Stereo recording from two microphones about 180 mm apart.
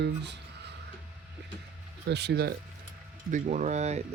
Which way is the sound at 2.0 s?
70° right (ahead or behind).